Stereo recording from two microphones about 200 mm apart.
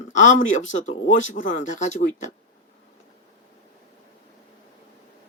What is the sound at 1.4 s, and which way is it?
Speech, 40° left (ahead or behind).